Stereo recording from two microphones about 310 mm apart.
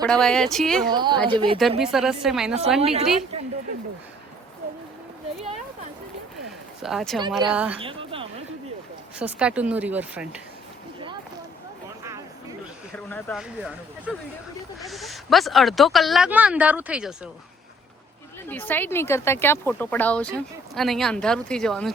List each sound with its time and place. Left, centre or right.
0.0 s speech: centre
0.9 s a woman's voice: centre
1.8 s speech: centre
2.8 s a woman's voice: centre
6.8 s speech: centre
7.9 s a sound: centre
9.1 s speech: centre
12.0 s a sound: centre
13.0 s speech: centre
18.4 s speech: centre